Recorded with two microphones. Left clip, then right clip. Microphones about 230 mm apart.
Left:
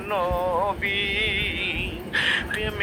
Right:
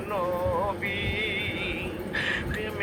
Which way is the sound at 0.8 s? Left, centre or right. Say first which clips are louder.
Left 5 dB; left.